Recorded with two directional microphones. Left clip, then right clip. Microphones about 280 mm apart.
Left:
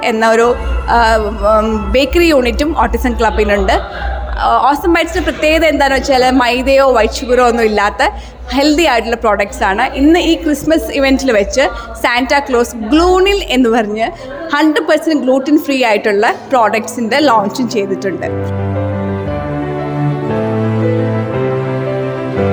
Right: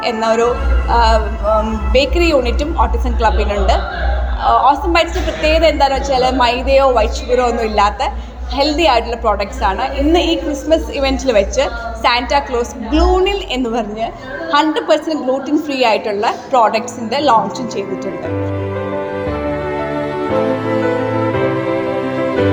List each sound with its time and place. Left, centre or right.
0.0 s a woman's voice: left